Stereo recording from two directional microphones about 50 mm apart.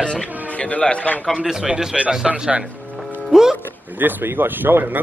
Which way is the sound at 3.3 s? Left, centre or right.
Centre.